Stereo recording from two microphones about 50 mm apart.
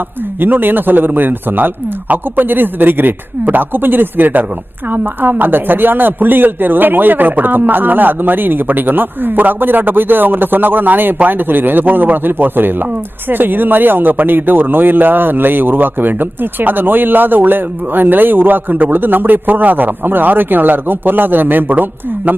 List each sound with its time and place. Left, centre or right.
0.3 s speech: right